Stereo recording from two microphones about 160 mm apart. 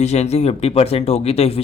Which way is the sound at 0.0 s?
45° left (ahead or behind).